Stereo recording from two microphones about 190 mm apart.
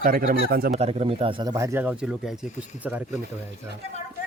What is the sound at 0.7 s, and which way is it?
Speech, 30° right (ahead or behind).